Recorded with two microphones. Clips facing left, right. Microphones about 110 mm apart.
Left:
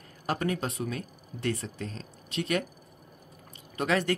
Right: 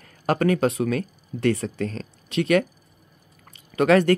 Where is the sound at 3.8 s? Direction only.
60° right (ahead or behind).